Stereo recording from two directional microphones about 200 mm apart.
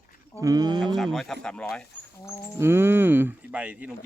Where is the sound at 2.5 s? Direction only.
10° right (ahead or behind).